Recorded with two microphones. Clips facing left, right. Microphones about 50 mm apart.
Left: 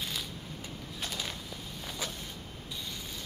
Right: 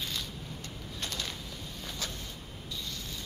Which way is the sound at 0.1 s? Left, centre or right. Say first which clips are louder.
Even; centre.